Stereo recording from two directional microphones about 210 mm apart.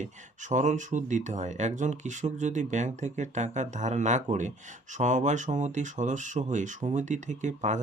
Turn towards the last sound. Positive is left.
turn(degrees=-35)  # may be behind; listen again after turning